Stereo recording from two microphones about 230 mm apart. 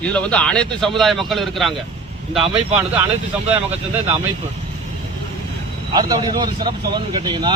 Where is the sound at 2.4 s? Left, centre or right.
Right.